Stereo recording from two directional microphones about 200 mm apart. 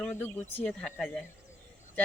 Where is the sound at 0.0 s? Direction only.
5° left (ahead or behind).